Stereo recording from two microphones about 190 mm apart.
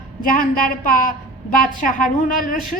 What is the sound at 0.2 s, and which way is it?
A woman's voice, 45° left (ahead or behind).